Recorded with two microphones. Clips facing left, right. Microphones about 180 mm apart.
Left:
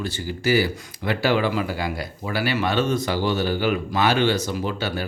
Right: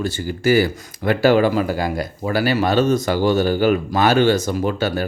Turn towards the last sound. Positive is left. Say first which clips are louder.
# right 6 dB
turn(degrees=-45)  # may be behind; listen again after turning